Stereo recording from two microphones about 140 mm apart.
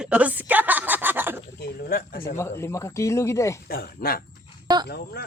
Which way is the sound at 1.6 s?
90° left.